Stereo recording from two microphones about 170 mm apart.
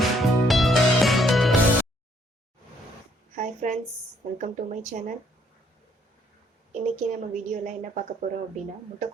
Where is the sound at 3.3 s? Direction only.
45° right (ahead or behind).